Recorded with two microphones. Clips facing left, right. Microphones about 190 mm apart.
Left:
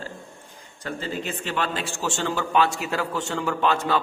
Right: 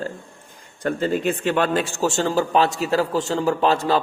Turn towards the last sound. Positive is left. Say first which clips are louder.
# right 4 dB
turn(degrees=-35)  # may be behind; listen again after turning